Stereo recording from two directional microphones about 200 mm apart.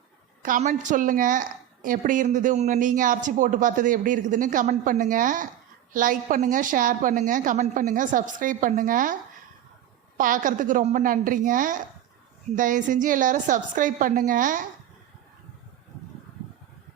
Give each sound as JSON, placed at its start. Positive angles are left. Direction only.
{"t": 0.4, "sound": "a woman's voice", "side_deg": -40}
{"t": 10.2, "sound": "a woman's voice", "side_deg": -40}